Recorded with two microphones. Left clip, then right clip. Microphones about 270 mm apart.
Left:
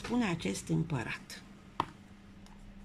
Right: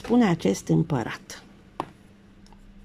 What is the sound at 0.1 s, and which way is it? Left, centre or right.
Speech, right.